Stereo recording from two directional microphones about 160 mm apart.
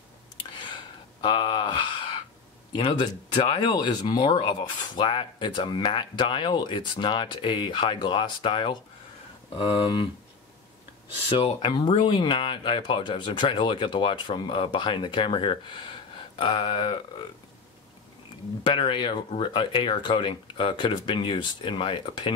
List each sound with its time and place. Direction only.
1.2 s gasp: 30° left (ahead or behind)
2.7 s speech: 25° left (ahead or behind)
11.2 s speech: 30° left (ahead or behind)
18.6 s speech: 30° left (ahead or behind)